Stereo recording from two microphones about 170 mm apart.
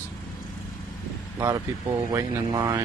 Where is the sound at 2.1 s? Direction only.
20° right (ahead or behind).